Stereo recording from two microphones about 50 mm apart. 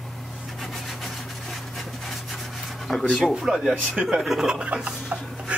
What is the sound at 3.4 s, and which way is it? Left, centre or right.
Speech, centre.